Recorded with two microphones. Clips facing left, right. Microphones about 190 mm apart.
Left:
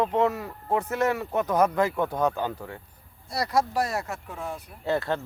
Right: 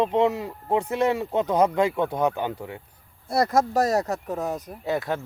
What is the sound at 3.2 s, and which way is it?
Speech, 50° right (ahead or behind).